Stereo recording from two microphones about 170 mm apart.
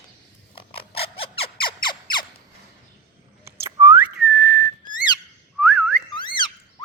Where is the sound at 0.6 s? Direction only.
35° left (ahead or behind).